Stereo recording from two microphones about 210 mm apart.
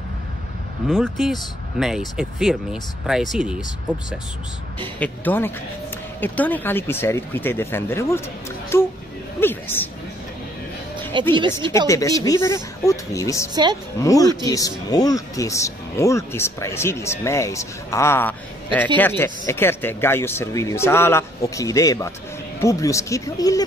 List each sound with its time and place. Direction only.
0.8 s speech: centre (ahead or behind)
4.9 s speech: 10° left (ahead or behind)
11.1 s a woman's voice: 20° right (ahead or behind)
11.9 s speech: 15° left (ahead or behind)